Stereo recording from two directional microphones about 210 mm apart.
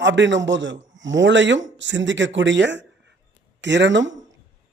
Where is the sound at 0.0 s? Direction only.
60° right (ahead or behind).